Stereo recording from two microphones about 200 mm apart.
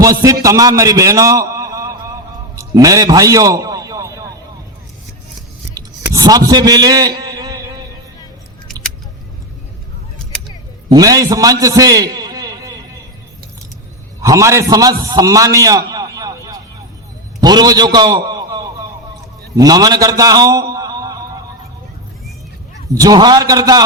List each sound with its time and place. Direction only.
0.0 s a man's voice: 15° right (ahead or behind)
5.7 s a sound: 15° right (ahead or behind)
10.8 s a man's voice: 20° right (ahead or behind)
11.6 s a sound: 15° right (ahead or behind)
14.2 s a man's voice: 15° right (ahead or behind)
15.0 s music: 15° right (ahead or behind)
17.4 s a man's voice: 20° right (ahead or behind)
23.0 s a man's voice: 20° right (ahead or behind)